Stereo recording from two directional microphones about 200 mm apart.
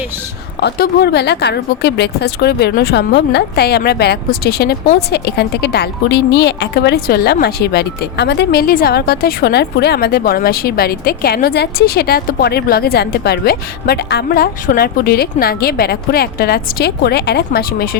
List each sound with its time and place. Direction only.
0.6 s a woman's voice: 55° left (ahead or behind)